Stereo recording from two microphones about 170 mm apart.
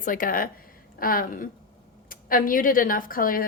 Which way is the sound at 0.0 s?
55° left (ahead or behind).